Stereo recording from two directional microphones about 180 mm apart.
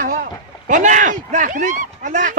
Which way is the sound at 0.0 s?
50° right (ahead or behind).